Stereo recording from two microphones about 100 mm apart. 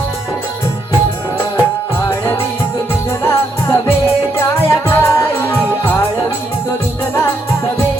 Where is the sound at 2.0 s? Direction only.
25° left (ahead or behind).